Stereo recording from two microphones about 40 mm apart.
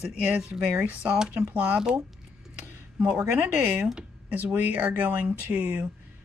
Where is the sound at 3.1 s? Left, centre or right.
Right.